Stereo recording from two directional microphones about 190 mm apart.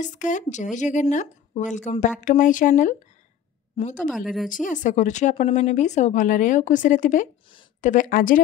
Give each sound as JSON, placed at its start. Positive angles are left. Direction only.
{"t": 0.0, "sound": "speech", "side_deg": 40}
{"t": 4.1, "sound": "speech", "side_deg": 0}
{"t": 4.5, "sound": "speech", "side_deg": 45}